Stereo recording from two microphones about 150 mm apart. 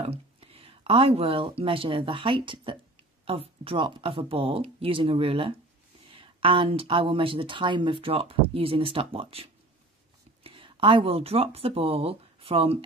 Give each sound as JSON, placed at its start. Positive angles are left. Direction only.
{"t": 0.0, "sound": "a woman's voice", "side_deg": -40}